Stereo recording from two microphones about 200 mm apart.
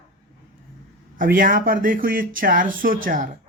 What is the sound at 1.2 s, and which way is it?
Speech, 45° right (ahead or behind).